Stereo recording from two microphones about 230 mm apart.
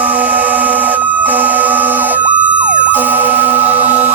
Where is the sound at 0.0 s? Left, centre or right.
Centre.